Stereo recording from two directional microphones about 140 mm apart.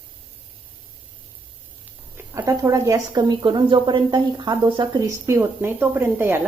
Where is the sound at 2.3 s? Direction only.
20° right (ahead or behind).